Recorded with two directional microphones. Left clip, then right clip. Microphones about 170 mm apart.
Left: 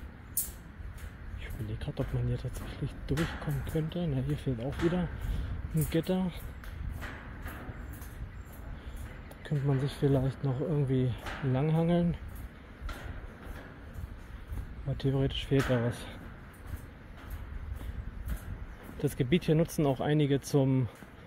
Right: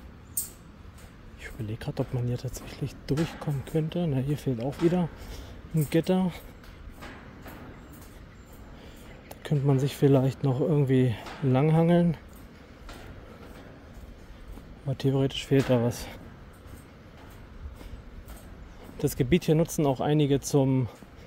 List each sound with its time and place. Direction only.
1.4 s speech: 45° right (ahead or behind)
9.4 s speech: 60° right (ahead or behind)
14.9 s speech: 40° right (ahead or behind)
18.9 s speech: 35° right (ahead or behind)